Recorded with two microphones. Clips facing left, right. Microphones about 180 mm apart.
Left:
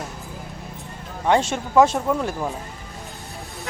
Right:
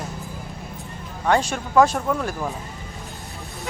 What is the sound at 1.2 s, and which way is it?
Speech, 20° left (ahead or behind).